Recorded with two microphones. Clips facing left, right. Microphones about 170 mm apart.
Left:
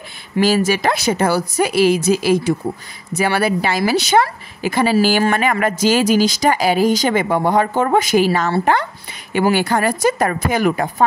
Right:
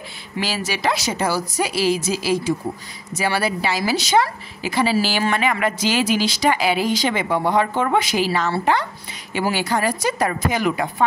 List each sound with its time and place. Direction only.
0.4 s a woman's voice: 45° left (ahead or behind)